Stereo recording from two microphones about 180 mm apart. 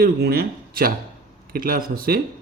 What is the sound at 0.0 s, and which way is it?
A man's voice, 60° right (ahead or behind).